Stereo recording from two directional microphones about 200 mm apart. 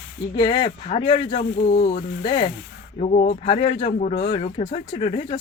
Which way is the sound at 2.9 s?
40° left (ahead or behind).